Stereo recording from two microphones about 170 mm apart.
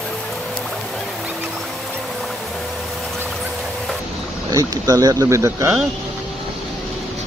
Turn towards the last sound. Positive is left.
turn(degrees=-15)  # may be behind; listen again after turning